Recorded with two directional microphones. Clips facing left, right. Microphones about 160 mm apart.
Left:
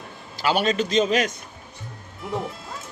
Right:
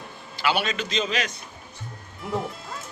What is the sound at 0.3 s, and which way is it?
Speech, 40° left (ahead or behind).